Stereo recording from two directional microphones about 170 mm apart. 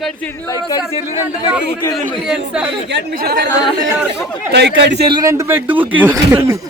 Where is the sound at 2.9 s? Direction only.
75° right (ahead or behind).